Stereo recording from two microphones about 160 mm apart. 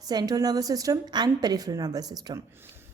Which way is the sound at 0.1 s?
25° right (ahead or behind).